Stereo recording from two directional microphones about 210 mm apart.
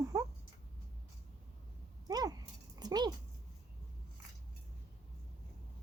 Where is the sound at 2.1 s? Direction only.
20° right (ahead or behind).